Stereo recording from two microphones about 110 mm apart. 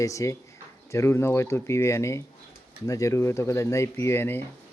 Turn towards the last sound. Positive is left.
turn(degrees=20)  # may be behind; listen again after turning